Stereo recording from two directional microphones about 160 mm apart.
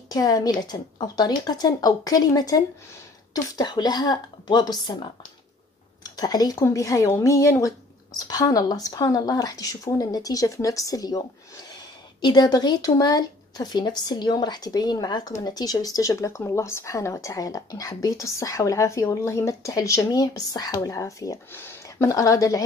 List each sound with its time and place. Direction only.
0.1 s speech: 25° left (ahead or behind)